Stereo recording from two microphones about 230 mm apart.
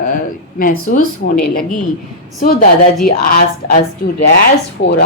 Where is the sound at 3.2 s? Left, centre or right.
Left.